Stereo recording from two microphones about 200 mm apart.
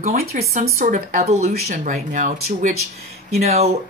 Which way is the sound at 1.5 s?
45° right (ahead or behind).